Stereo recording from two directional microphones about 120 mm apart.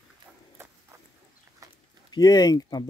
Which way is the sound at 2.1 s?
35° left (ahead or behind).